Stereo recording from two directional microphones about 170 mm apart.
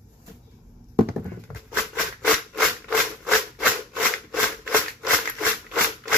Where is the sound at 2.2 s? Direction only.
Centre (ahead or behind).